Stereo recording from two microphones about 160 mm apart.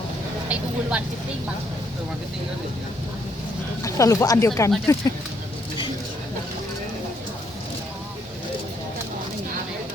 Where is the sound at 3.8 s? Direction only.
20° left (ahead or behind).